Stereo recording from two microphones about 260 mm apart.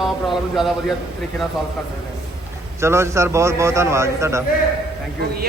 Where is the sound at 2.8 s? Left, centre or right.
Centre.